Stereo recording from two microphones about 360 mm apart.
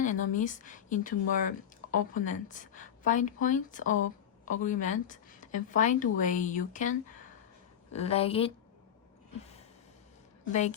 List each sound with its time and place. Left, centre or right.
0.0 s a woman's voice: left
10.5 s speech: centre